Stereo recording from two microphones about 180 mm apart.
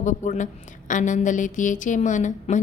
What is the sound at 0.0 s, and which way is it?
A woman's voice, 40° left (ahead or behind).